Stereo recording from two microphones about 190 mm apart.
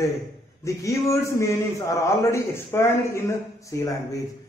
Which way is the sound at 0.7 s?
15° left (ahead or behind).